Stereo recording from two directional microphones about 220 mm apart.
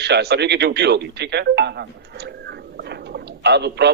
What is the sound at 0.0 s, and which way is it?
A man's voice, 50° right (ahead or behind).